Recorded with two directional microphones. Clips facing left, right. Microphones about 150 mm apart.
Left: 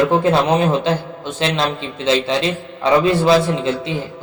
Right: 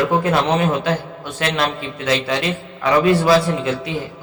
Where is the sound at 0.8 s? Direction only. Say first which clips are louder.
Left 2 dB; 25° left (ahead or behind).